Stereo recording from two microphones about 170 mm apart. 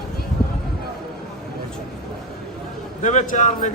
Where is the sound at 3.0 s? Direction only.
45° left (ahead or behind).